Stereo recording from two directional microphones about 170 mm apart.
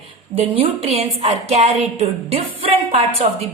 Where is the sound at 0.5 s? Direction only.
35° right (ahead or behind).